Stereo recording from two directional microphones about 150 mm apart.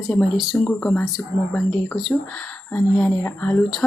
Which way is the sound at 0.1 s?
Centre (ahead or behind).